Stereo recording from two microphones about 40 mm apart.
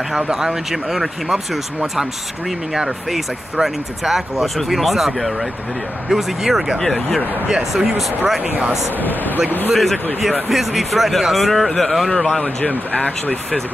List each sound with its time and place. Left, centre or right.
0.3 s speech: centre
6.8 s speech: centre
8.9 s speech: left
9.7 s speech: centre
12.3 s speech: centre
12.9 s speech: left